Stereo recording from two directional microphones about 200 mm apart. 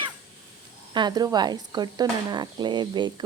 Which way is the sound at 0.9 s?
20° right (ahead or behind).